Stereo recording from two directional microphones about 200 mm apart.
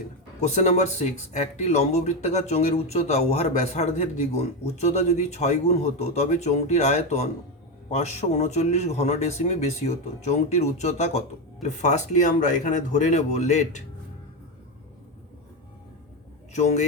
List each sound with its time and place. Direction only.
0.4 s speech: 35° left (ahead or behind)
16.5 s speech: 35° left (ahead or behind)